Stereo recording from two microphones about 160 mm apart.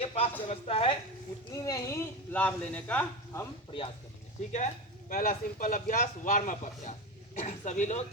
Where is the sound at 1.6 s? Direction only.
20° left (ahead or behind).